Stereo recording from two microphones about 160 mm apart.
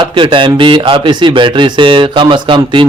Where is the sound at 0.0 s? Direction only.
30° right (ahead or behind).